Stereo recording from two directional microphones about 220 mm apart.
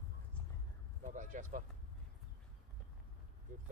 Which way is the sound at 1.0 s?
35° right (ahead or behind).